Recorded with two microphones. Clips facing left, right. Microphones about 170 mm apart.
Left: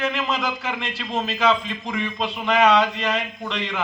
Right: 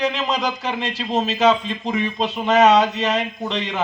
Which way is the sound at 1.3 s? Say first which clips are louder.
Right 3 dB; 25° right (ahead or behind).